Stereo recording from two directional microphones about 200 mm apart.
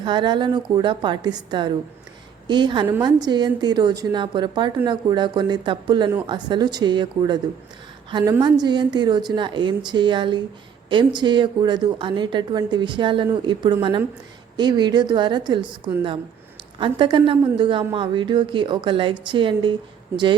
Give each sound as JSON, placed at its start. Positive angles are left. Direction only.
{"t": 0.0, "sound": "a woman's voice", "side_deg": -25}
{"t": 16.8, "sound": "a woman's voice", "side_deg": -25}